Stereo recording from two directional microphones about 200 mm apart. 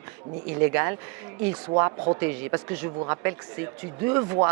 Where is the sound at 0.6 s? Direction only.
10° right (ahead or behind).